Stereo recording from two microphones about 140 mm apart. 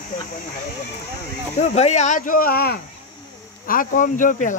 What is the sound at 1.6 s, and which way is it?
Speech, 55° left (ahead or behind).